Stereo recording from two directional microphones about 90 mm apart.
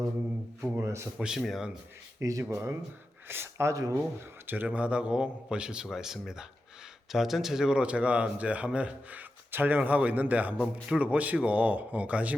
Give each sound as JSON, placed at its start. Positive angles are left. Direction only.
{"t": 0.6, "sound": "speech", "side_deg": -30}
{"t": 1.2, "sound": "speech", "side_deg": -5}
{"t": 2.1, "sound": "speech", "side_deg": -30}
{"t": 4.4, "sound": "speech", "side_deg": -20}